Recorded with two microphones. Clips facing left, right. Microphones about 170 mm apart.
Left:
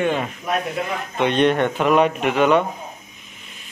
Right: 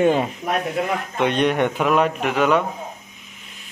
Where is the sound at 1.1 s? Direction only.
5° right (ahead or behind).